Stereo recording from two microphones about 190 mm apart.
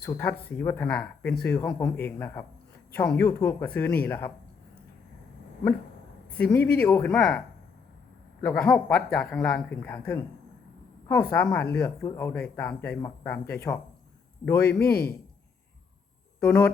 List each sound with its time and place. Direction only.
0.0 s speech: 10° left (ahead or behind)
6.3 s speech: 10° left (ahead or behind)
16.4 s speech: 10° left (ahead or behind)